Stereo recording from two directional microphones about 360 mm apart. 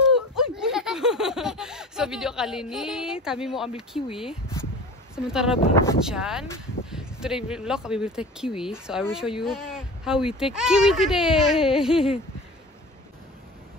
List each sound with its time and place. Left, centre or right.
0.0 s snicker: centre
5.1 s speech: centre